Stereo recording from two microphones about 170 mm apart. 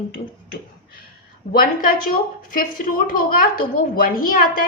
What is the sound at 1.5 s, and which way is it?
A woman's voice, 55° left (ahead or behind).